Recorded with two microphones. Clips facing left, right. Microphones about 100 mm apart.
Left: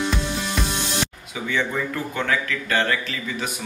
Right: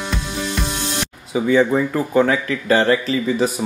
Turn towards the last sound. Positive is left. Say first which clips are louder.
# right 11 dB
turn(degrees=-30)  # may be behind; listen again after turning